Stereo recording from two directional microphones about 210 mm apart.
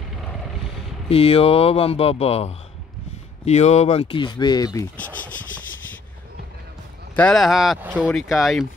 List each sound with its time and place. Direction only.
1.0 s speech: 30° left (ahead or behind)
4.9 s speech: 5° left (ahead or behind)
7.2 s speech: centre (ahead or behind)